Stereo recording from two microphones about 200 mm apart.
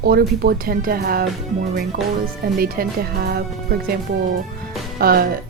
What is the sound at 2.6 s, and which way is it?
Speech, 50° right (ahead or behind).